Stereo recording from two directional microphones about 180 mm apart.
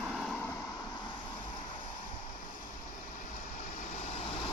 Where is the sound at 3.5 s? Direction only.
40° left (ahead or behind).